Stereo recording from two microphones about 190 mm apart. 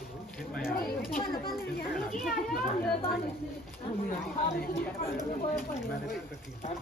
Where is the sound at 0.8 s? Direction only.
50° left (ahead or behind).